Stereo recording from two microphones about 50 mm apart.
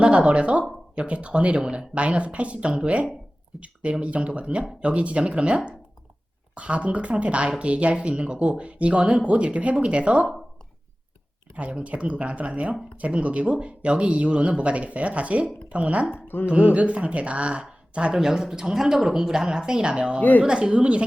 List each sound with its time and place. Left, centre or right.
0.0 s speech: right
11.8 s speech: right
16.1 s speech: left
16.5 s speech: right
18.2 s speech: centre